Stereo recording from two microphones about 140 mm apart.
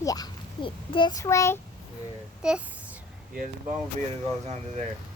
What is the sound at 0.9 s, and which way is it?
Speech, 35° left (ahead or behind).